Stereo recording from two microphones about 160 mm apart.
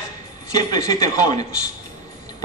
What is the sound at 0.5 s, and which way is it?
Speech, 20° left (ahead or behind).